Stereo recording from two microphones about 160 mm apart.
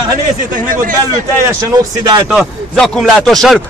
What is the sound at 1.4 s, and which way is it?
Speech, 25° right (ahead or behind).